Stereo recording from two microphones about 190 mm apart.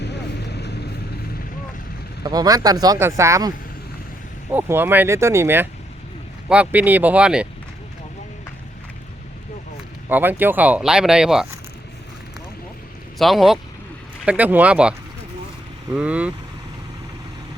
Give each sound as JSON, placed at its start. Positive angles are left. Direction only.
{"t": 0.0, "sound": "vehicle", "side_deg": 60}
{"t": 2.2, "sound": "speech", "side_deg": -20}
{"t": 4.5, "sound": "speech", "side_deg": -10}
{"t": 10.1, "sound": "speech", "side_deg": -10}
{"t": 13.1, "sound": "speech", "side_deg": 0}